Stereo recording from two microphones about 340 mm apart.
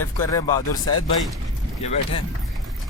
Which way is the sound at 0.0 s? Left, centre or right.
Centre.